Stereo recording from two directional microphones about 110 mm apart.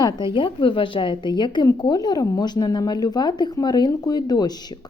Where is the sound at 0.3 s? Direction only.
50° left (ahead or behind).